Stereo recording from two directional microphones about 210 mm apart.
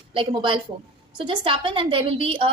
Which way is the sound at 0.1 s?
25° right (ahead or behind).